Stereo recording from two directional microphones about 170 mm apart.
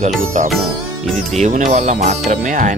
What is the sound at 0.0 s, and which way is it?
Music, 45° right (ahead or behind).